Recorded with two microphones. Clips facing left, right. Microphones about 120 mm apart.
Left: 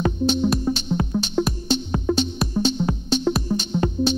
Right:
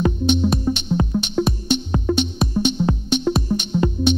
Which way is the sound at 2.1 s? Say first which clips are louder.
Right 1 dB; 5° left (ahead or behind).